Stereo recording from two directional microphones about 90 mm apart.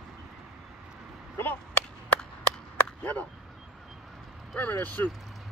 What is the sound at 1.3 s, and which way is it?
Chop, 20° left (ahead or behind).